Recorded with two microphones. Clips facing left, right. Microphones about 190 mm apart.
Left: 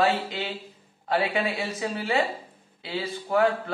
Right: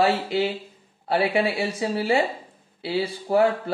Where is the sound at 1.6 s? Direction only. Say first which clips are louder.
Right 5 dB; 30° right (ahead or behind).